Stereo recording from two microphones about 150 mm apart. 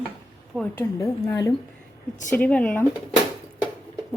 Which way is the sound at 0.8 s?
20° left (ahead or behind).